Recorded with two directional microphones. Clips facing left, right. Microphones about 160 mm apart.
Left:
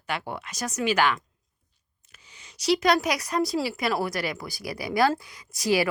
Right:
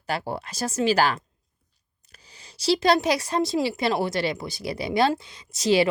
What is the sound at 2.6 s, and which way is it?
Speech, 30° right (ahead or behind).